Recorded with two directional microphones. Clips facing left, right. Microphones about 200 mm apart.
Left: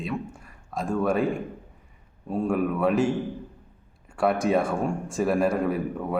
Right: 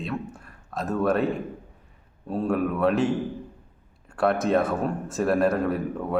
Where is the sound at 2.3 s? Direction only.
5° left (ahead or behind).